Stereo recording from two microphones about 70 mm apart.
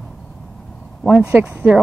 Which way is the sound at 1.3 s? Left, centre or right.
Right.